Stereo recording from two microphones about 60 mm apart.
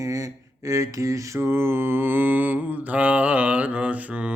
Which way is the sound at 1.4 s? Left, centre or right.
Right.